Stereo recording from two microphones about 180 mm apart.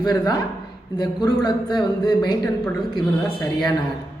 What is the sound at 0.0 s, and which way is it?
A man's voice, 20° left (ahead or behind).